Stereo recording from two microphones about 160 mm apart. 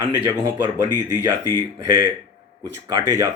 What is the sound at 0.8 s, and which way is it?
Speech, 25° left (ahead or behind).